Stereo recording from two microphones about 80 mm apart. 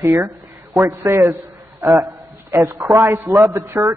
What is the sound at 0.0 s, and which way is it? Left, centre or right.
A man's voice, right.